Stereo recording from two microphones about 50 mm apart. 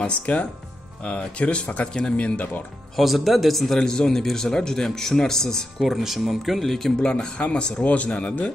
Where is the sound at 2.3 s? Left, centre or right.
Left.